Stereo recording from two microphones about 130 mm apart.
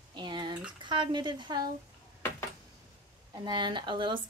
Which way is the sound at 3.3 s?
35° right (ahead or behind).